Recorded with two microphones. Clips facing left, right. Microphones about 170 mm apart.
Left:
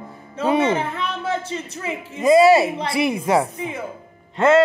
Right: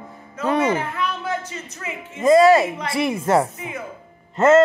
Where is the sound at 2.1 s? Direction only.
5° left (ahead or behind).